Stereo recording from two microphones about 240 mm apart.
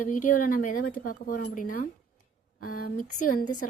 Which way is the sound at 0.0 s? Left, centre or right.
Left.